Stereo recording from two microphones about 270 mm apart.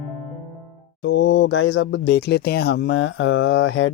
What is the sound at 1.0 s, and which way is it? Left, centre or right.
Speech, left.